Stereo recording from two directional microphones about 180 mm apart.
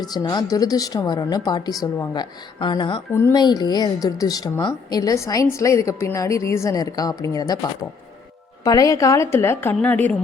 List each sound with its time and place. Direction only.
0.0 s a woman's voice: 20° left (ahead or behind)
3.1 s a woman's voice: 15° left (ahead or behind)